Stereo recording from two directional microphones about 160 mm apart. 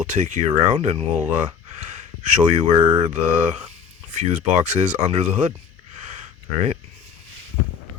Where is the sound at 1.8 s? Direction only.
50° right (ahead or behind).